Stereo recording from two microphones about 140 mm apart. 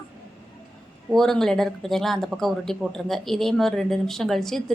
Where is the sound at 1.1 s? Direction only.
5° left (ahead or behind).